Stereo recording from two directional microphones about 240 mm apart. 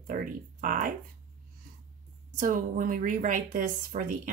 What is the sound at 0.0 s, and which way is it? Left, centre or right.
Speech, right.